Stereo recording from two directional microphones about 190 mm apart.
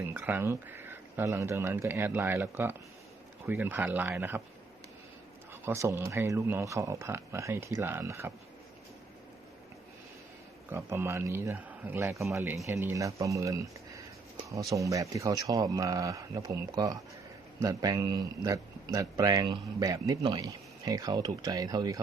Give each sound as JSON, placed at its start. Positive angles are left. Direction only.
{"t": 0.0, "sound": "speech", "side_deg": -10}
{"t": 5.6, "sound": "speech", "side_deg": -15}
{"t": 10.7, "sound": "speech", "side_deg": -15}